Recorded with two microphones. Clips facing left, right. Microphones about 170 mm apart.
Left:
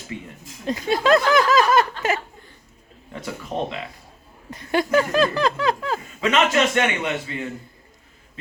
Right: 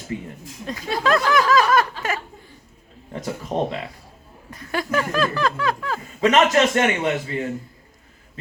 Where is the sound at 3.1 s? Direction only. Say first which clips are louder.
Right 3 dB; 40° right (ahead or behind).